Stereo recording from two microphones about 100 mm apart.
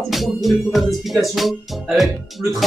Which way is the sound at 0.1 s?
Centre (ahead or behind).